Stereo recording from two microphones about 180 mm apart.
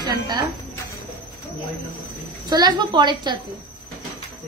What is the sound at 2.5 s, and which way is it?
Speech, 25° right (ahead or behind).